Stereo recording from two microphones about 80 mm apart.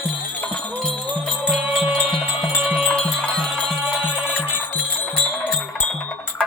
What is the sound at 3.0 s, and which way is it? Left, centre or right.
Music, centre.